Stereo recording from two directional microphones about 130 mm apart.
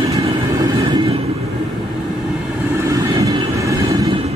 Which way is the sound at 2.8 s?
25° right (ahead or behind).